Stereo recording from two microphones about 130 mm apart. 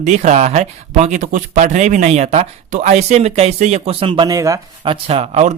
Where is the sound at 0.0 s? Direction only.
65° right (ahead or behind); by 4.3 s 40° right (ahead or behind).